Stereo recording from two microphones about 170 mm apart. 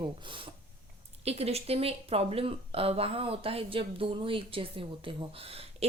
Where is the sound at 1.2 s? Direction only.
40° right (ahead or behind).